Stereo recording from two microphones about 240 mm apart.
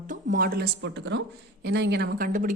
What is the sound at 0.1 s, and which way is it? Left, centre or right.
A woman's voice, right.